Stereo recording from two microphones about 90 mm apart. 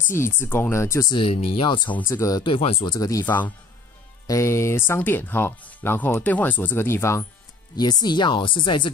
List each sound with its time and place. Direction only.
0.1 s speech: 25° left (ahead or behind)
1.0 s speech: 75° left (ahead or behind)
2.0 s speech: 35° left (ahead or behind)
2.4 s speech: 70° left (ahead or behind)
3.3 s speech: 20° left (ahead or behind)
4.3 s speech: 30° left (ahead or behind)
7.7 s speech: 50° left (ahead or behind); by 8.9 s 65° left (ahead or behind)